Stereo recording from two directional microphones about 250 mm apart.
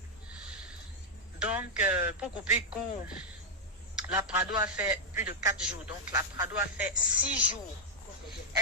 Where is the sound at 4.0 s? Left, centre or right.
Centre.